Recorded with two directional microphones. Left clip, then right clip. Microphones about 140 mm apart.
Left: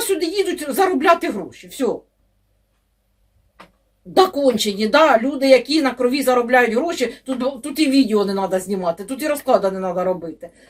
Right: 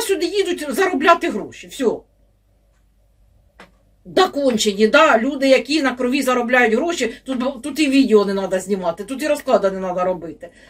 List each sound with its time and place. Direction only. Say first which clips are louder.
0.1 s speech: right 1 dB; 20° left (ahead or behind)
4.4 s speech: right 1 dB; 20° left (ahead or behind)